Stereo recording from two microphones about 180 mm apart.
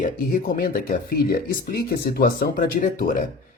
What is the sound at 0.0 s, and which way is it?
Speech, 50° left (ahead or behind).